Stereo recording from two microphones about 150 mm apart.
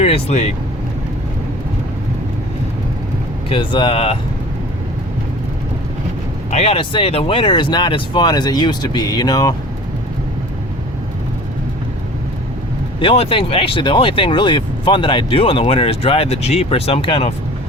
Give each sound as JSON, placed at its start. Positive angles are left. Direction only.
{"t": 0.0, "sound": "speech", "side_deg": 45}
{"t": 3.5, "sound": "speech", "side_deg": 35}
{"t": 6.5, "sound": "speech", "side_deg": 45}
{"t": 13.0, "sound": "speech", "side_deg": 40}